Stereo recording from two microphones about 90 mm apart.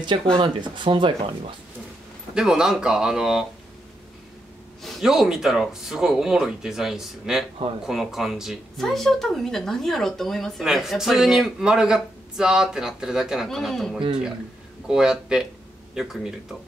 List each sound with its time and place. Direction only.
0.4 s speech: 65° right (ahead or behind)
2.3 s speech: 5° right (ahead or behind)
4.8 s speech: centre (ahead or behind)